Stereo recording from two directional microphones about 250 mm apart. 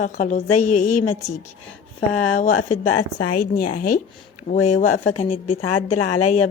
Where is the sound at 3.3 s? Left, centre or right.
Left.